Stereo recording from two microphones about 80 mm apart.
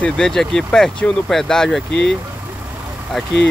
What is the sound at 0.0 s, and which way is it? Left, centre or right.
Speech, centre.